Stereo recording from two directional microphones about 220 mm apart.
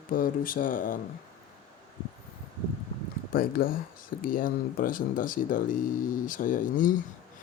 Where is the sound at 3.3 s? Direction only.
40° left (ahead or behind).